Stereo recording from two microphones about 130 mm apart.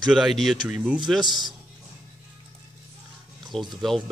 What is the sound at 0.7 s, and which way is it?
Speech, 10° right (ahead or behind).